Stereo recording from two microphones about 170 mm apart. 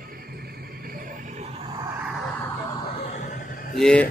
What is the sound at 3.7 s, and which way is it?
Speech, 5° left (ahead or behind).